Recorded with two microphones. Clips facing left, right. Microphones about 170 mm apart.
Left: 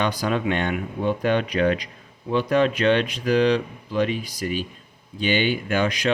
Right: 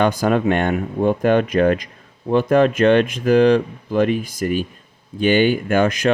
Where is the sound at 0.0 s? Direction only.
50° right (ahead or behind).